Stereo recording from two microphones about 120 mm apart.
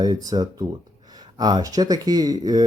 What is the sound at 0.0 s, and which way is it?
Speech, 30° right (ahead or behind).